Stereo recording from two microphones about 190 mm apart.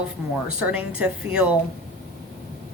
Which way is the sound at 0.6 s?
5° right (ahead or behind).